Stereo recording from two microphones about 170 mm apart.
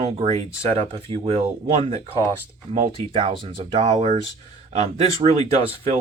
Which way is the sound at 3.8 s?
45° right (ahead or behind).